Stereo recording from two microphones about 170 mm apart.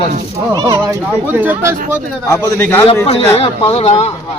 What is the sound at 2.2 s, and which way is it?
Speech, 20° left (ahead or behind).